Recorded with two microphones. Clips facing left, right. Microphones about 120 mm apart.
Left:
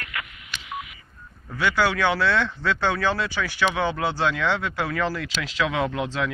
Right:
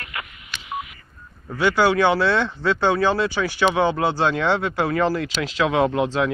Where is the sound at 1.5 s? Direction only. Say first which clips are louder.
Right 4 dB; 30° right (ahead or behind).